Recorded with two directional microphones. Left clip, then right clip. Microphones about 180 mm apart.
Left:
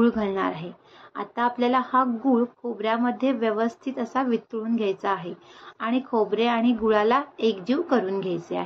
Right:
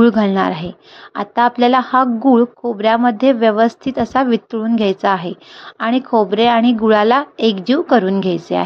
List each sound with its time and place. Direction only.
0.0 s speech: 55° right (ahead or behind)